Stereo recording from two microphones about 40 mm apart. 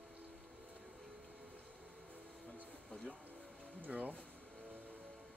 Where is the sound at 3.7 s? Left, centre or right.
Right.